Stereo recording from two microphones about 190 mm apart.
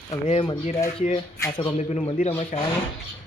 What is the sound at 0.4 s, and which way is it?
Speech, 30° left (ahead or behind).